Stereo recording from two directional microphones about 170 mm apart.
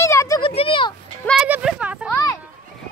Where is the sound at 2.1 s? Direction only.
20° left (ahead or behind).